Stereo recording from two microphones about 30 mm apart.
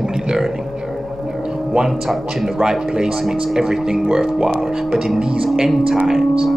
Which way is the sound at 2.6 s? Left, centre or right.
Centre.